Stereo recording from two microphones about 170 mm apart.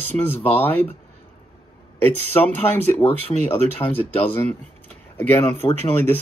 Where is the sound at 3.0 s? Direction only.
35° left (ahead or behind).